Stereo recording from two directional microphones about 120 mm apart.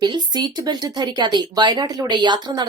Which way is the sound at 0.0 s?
40° right (ahead or behind).